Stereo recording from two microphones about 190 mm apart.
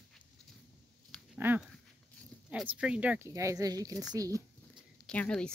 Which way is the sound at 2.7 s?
5° right (ahead or behind).